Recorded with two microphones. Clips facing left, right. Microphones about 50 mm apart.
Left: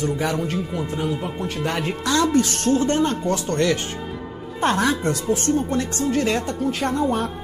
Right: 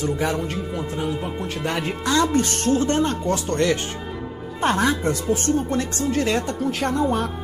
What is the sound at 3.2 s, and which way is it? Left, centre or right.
Speech, left.